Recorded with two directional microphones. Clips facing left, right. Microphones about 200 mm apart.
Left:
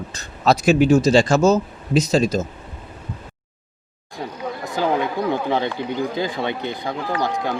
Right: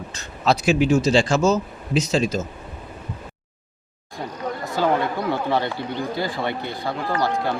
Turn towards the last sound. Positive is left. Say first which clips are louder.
# even
turn(degrees=15)  # may be behind; listen again after turning